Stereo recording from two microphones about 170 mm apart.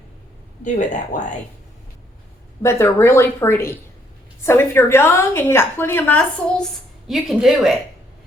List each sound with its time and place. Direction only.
0.6 s speech: 45° left (ahead or behind)
2.6 s a woman's voice: 15° left (ahead or behind)
7.1 s a woman's voice: centre (ahead or behind)